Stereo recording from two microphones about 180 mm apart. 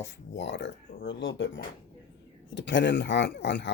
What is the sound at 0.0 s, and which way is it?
Speech, 80° left.